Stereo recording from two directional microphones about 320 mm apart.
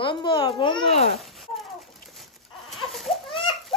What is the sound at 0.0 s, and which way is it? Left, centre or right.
Babbling, centre.